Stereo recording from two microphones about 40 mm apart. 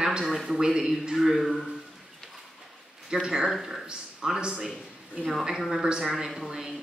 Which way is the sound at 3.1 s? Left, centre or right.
Centre.